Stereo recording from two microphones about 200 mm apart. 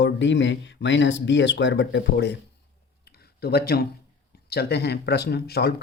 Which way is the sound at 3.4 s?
50° left (ahead or behind).